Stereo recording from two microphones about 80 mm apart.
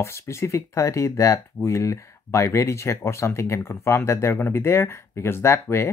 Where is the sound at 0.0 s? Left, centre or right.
Left.